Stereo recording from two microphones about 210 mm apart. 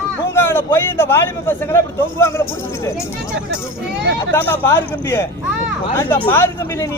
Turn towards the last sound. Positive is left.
turn(degrees=10)  # may be behind; listen again after turning